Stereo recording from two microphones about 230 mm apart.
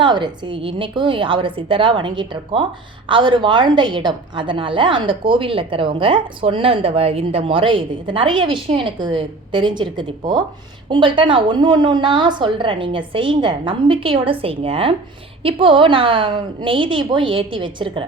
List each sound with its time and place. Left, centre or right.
0.0 s a woman's voice: right